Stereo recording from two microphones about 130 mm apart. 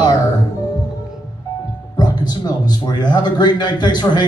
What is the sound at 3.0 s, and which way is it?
A man's voice, 35° left (ahead or behind).